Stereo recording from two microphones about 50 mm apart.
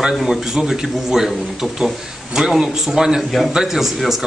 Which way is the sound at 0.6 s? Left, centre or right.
Centre.